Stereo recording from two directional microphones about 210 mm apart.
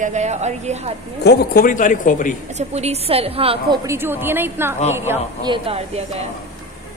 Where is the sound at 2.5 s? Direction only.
30° right (ahead or behind).